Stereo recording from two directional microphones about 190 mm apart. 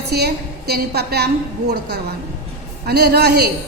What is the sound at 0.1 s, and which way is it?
A woman's voice, 60° right (ahead or behind).